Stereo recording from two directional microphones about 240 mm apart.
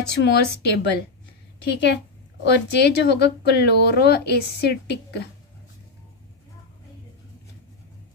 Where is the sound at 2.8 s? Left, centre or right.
Left.